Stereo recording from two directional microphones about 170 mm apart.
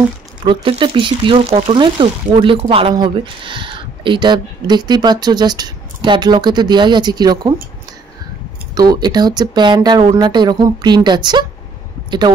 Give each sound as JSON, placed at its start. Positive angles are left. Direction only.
{"t": 0.4, "sound": "speech", "side_deg": -30}
{"t": 8.7, "sound": "speech", "side_deg": -25}